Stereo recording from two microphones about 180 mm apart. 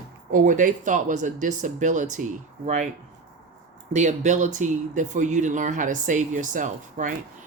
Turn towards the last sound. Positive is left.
turn(degrees=-45)  # may be behind; listen again after turning